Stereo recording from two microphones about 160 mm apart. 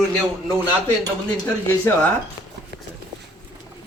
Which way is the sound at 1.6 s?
10° left (ahead or behind).